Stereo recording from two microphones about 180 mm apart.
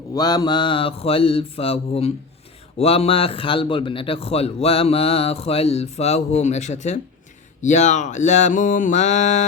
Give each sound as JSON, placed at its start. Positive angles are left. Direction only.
{"t": 0.1, "sound": "a man's voice", "side_deg": 20}